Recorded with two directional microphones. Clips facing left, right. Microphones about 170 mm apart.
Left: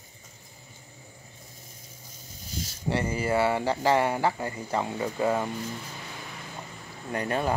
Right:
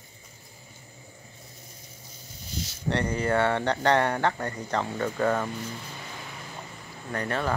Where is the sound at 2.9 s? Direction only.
5° left (ahead or behind).